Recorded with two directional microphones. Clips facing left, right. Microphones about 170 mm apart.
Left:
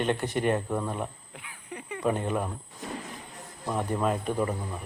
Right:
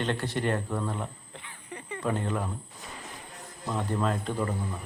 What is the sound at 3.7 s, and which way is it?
Speech, 15° left (ahead or behind).